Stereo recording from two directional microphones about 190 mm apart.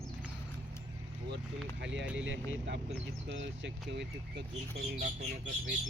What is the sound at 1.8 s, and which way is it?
Speech, 70° right (ahead or behind).